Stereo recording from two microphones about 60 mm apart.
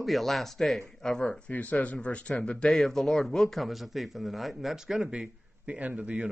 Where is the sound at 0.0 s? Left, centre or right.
Centre.